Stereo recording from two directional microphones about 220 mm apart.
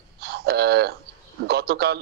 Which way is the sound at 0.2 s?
45° right (ahead or behind).